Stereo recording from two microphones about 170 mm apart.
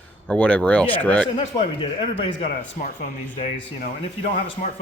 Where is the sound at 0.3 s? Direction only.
10° left (ahead or behind).